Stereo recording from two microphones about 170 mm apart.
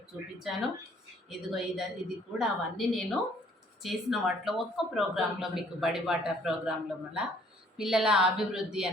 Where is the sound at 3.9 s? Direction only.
Centre (ahead or behind).